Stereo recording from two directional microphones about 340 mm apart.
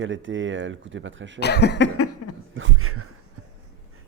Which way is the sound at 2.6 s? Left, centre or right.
Right.